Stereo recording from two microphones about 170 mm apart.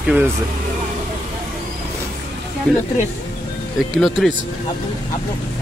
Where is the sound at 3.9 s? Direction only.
Centre (ahead or behind).